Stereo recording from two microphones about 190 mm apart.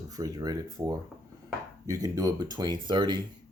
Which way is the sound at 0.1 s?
20° right (ahead or behind).